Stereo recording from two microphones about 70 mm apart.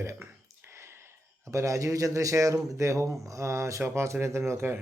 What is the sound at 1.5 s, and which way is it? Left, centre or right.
A man's voice, right.